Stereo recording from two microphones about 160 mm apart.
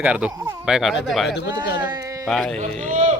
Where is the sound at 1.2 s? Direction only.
90° left.